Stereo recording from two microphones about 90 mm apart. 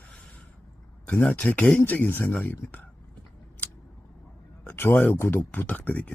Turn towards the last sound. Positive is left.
turn(degrees=15)  # may be behind; listen again after turning